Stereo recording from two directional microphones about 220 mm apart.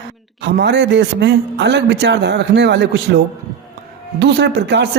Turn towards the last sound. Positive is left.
turn(degrees=-50)  # may be behind; listen again after turning